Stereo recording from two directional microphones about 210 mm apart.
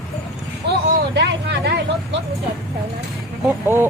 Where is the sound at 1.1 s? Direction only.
55° right (ahead or behind).